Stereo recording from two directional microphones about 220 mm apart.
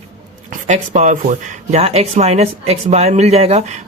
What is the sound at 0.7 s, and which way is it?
Speech, 35° right (ahead or behind).